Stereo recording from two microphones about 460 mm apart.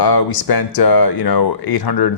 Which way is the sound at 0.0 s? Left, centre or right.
Left.